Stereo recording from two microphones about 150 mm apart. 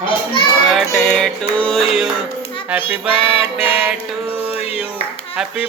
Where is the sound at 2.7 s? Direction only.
10° right (ahead or behind).